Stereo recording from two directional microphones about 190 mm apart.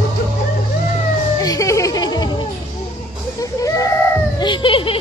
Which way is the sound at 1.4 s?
15° left (ahead or behind).